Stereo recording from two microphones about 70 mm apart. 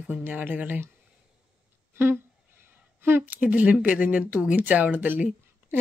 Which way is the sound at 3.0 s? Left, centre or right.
Right.